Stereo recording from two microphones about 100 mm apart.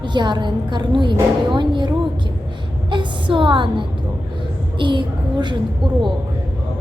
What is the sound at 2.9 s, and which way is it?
A woman's voice, 55° right (ahead or behind).